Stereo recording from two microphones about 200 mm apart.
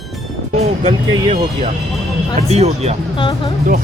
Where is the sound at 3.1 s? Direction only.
25° left (ahead or behind).